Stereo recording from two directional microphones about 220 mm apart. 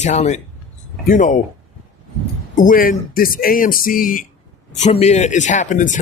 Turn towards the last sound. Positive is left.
turn(degrees=35)  # may be behind; listen again after turning